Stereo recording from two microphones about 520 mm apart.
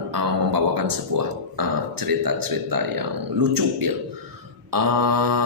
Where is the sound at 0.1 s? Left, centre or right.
Right.